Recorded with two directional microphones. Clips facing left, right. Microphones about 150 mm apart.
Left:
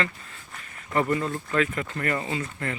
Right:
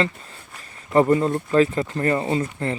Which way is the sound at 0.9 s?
35° right (ahead or behind).